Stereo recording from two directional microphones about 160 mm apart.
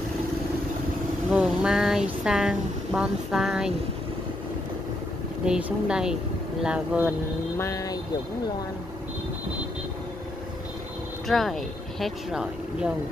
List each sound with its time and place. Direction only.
1.3 s speech: 5° right (ahead or behind)
5.4 s speech: 5° right (ahead or behind)
7.5 s speech: 20° left (ahead or behind)
11.2 s speech: centre (ahead or behind)